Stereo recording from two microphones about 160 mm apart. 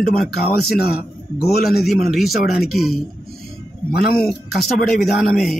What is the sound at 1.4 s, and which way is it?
Speech, 80° left.